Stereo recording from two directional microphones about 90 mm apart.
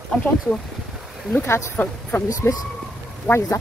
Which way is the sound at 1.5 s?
30° left (ahead or behind).